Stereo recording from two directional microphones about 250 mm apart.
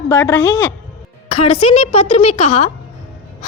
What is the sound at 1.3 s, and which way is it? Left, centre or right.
A woman's voice, left.